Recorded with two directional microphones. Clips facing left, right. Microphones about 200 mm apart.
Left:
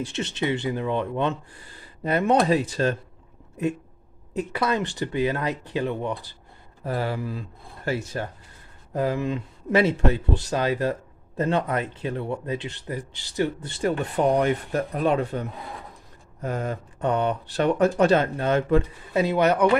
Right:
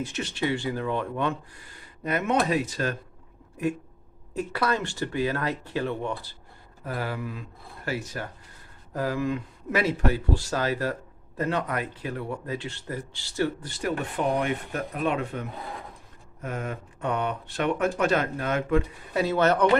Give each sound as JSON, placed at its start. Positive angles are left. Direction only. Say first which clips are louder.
{"t": 0.0, "sound": "speech", "louder": "left 2 dB", "side_deg": 25}
{"t": 4.4, "sound": "speech", "louder": "left 2 dB", "side_deg": 20}
{"t": 6.8, "sound": "speech", "louder": "left 4 dB", "side_deg": 30}
{"t": 14.4, "sound": "speech", "louder": "left 5 dB", "side_deg": 35}
{"t": 19.2, "sound": "speech", "louder": "left 2 dB", "side_deg": 15}